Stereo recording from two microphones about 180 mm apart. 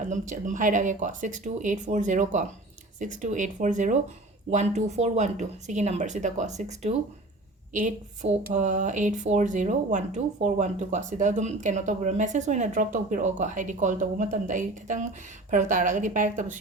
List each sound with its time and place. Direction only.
0.1 s speech: 45° right (ahead or behind)